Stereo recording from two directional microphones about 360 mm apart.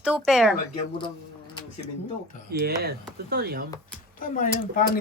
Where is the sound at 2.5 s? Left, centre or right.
Right.